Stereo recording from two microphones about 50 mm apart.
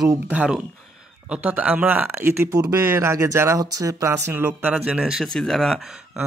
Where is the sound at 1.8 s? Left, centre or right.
Right.